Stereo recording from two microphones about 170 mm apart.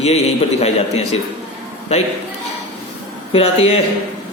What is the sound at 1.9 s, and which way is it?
Speech, 40° left (ahead or behind).